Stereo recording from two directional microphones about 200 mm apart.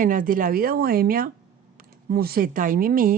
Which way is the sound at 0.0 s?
45° right (ahead or behind).